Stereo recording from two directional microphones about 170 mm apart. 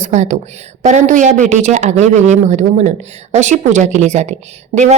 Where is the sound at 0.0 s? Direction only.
45° right (ahead or behind).